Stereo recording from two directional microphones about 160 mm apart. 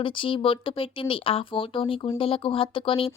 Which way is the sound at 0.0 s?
30° left (ahead or behind).